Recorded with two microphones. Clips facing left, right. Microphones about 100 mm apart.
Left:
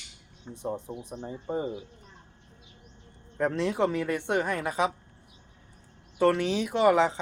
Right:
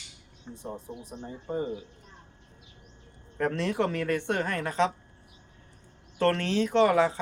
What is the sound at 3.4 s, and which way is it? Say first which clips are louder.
Speech: left 1 dB; 15° left (ahead or behind).